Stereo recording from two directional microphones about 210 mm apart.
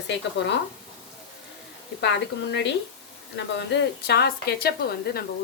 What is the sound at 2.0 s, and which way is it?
A woman's voice, 55° left (ahead or behind).